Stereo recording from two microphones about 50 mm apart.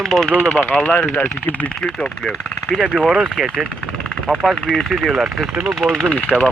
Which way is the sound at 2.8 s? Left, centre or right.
Centre.